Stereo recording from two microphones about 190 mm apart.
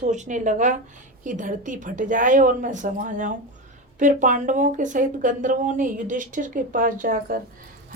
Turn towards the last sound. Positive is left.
turn(degrees=-50)  # may be behind; listen again after turning